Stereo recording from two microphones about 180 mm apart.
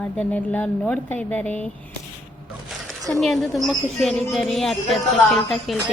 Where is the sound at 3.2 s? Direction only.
Centre (ahead or behind).